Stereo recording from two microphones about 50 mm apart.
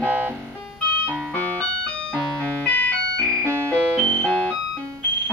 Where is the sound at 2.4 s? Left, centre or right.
Left.